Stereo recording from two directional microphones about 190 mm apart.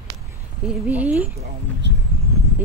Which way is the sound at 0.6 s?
5° right (ahead or behind).